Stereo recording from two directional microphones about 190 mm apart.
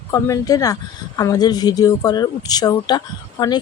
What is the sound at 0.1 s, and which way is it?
Speech, 15° left (ahead or behind).